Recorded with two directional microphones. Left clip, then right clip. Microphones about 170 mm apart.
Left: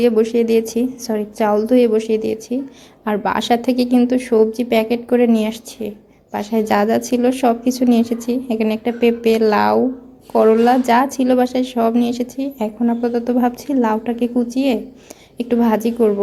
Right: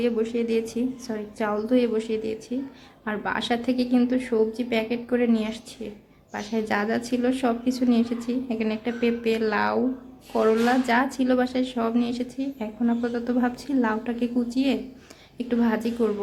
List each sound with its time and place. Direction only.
0.0 s a woman's voice: 25° left (ahead or behind)